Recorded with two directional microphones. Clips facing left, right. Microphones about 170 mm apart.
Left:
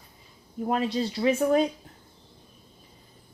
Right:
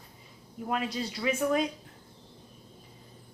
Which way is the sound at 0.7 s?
30° left (ahead or behind).